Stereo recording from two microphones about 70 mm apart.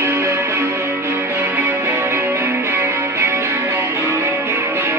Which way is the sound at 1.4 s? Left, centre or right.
Right.